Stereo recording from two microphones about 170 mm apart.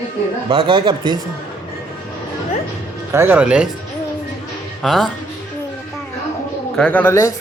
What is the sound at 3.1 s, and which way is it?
Speech, 10° right (ahead or behind).